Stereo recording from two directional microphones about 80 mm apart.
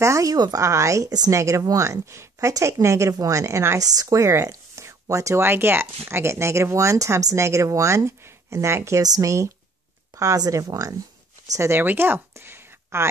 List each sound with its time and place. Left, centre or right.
0.0 s speech: right
9.0 s speech: right
11.8 s a sound: right